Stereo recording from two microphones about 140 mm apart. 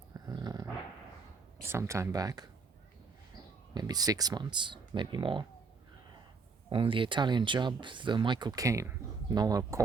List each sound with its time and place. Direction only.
0.1 s dog: 25° right (ahead or behind)
1.6 s speech: 20° right (ahead or behind)
3.8 s speech: 30° right (ahead or behind)
6.7 s speech: 35° right (ahead or behind)